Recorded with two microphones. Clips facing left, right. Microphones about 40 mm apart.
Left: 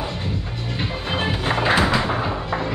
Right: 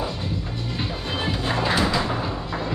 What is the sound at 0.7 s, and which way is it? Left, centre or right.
Music, left.